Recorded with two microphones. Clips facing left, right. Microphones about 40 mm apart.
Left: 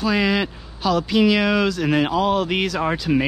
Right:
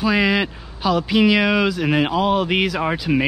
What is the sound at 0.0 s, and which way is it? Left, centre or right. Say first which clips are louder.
Speech: right 2 dB; centre.